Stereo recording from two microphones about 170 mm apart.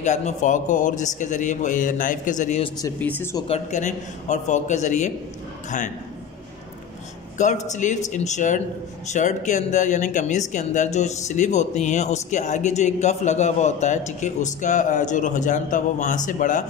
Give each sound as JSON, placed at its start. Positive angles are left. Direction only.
{"t": 0.0, "sound": "speech", "side_deg": 45}
{"t": 3.0, "sound": "speech", "side_deg": 10}
{"t": 3.4, "sound": "speech", "side_deg": 40}
{"t": 7.3, "sound": "speech", "side_deg": 45}